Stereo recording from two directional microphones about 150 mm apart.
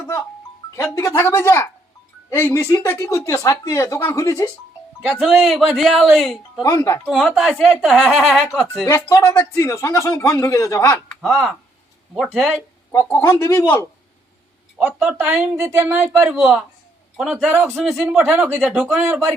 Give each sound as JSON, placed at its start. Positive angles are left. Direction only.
{"t": 0.8, "sound": "speech", "side_deg": 20}
{"t": 5.2, "sound": "speech", "side_deg": 0}
{"t": 6.6, "sound": "speech", "side_deg": 20}
{"t": 7.0, "sound": "speech", "side_deg": 0}
{"t": 8.9, "sound": "speech", "side_deg": 20}
{"t": 11.2, "sound": "speech", "side_deg": 0}
{"t": 12.9, "sound": "speech", "side_deg": 20}
{"t": 14.8, "sound": "speech", "side_deg": -10}
{"t": 16.3, "sound": "speech", "side_deg": -5}
{"t": 17.8, "sound": "speech", "side_deg": 0}
{"t": 18.3, "sound": "speech", "side_deg": -15}
{"t": 18.6, "sound": "speech", "side_deg": -5}